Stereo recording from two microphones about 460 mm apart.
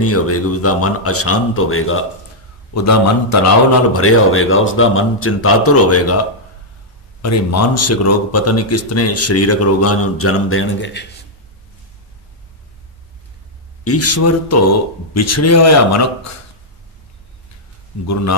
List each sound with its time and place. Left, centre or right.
0.0 s speech: left
7.2 s speech: left
13.8 s speech: left
18.0 s speech: left